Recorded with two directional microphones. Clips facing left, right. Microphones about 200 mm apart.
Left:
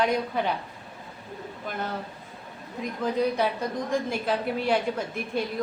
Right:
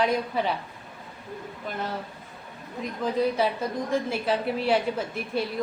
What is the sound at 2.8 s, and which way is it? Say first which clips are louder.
A woman's voice: even; centre (ahead or behind).